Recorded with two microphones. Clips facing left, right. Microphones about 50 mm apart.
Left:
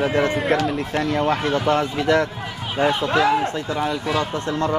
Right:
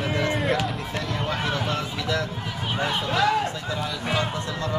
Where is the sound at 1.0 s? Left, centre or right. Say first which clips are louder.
Left 8 dB; left.